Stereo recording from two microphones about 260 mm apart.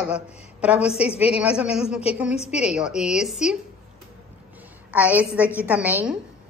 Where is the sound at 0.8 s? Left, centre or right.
Left.